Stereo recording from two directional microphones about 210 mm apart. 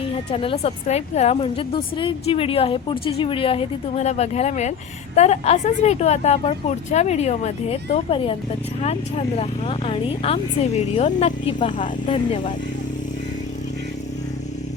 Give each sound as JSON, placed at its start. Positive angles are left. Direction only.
{"t": 0.0, "sound": "speech", "side_deg": 25}